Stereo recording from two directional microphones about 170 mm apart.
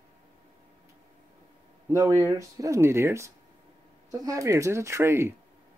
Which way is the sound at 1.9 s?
20° right (ahead or behind).